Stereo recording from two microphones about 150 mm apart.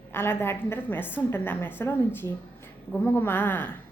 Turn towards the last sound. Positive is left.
turn(degrees=15)  # may be behind; listen again after turning